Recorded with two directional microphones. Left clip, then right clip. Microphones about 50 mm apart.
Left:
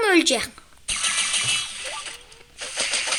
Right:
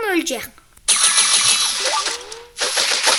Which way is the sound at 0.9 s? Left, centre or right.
Right.